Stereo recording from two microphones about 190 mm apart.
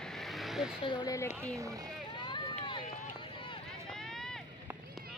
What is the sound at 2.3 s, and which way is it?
Run, 25° left (ahead or behind).